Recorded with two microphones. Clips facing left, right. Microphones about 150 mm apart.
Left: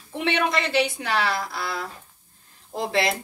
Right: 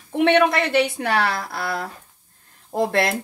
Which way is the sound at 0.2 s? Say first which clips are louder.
Right 7 dB; 55° right (ahead or behind).